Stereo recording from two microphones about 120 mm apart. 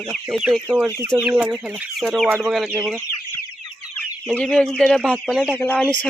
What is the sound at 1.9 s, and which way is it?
Speech, centre (ahead or behind).